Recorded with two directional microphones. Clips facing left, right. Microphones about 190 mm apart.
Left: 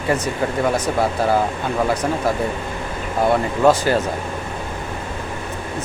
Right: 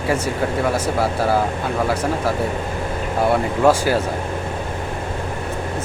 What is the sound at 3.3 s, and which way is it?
Speech, 10° right (ahead or behind).